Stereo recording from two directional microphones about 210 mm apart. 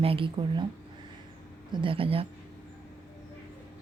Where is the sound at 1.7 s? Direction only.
25° right (ahead or behind).